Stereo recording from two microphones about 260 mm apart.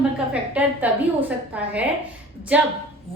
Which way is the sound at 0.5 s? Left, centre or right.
Centre.